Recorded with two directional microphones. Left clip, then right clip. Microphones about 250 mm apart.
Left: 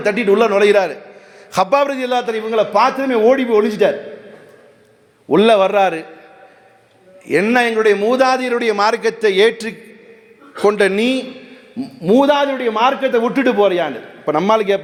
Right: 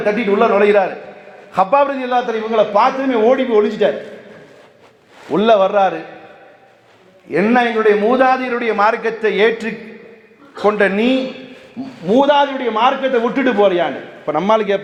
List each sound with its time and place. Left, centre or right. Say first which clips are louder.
0.0 s a man's voice: left 1 dB; left
5.3 s a man's voice: left 1 dB; left
7.3 s a man's voice: even; left
12.0 s a man's voice: even; left